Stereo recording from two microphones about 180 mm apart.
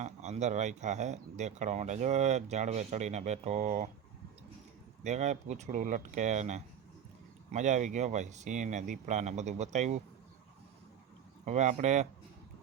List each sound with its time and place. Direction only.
0.0 s speech: 40° right (ahead or behind)
5.0 s speech: 40° right (ahead or behind)
11.4 s speech: 40° right (ahead or behind)